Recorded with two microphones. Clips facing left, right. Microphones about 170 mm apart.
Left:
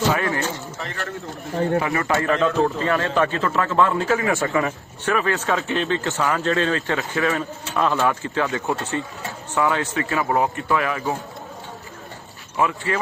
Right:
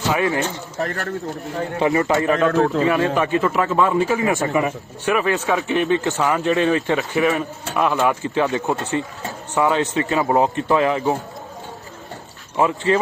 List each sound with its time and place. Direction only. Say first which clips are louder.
0.2 s a man's voice: right 4 dB; 20° right (ahead or behind)
0.8 s speech: right 7 dB; 45° right (ahead or behind)
1.8 s a man's voice: right 5 dB; 20° right (ahead or behind)
12.5 s speech: right 5 dB; 25° right (ahead or behind)